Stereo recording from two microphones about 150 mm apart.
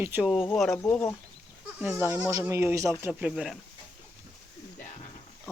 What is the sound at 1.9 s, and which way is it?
Speech, 15° right (ahead or behind).